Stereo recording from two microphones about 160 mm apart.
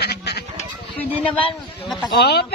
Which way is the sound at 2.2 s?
90° left.